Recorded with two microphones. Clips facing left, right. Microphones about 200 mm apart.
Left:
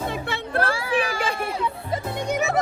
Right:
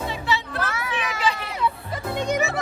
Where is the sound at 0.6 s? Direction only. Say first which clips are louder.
Left 5 dB; 30° left (ahead or behind).